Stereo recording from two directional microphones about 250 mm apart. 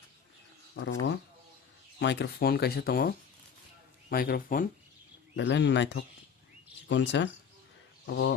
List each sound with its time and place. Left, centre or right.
0.8 s speech: left
4.1 s speech: left
5.4 s speech: left